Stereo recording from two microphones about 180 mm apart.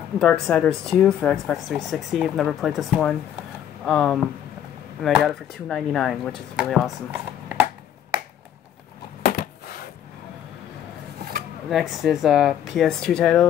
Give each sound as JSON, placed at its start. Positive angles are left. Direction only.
{"t": 0.2, "sound": "speech", "side_deg": 5}
{"t": 9.2, "sound": "a sound", "side_deg": 55}
{"t": 11.7, "sound": "speech", "side_deg": 0}